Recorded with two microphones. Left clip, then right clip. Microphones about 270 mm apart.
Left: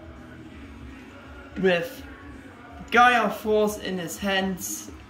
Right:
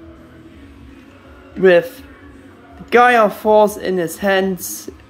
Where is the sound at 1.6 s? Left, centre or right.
Centre.